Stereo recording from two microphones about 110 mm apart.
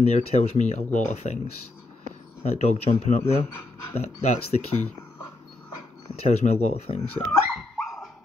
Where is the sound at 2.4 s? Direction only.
80° left.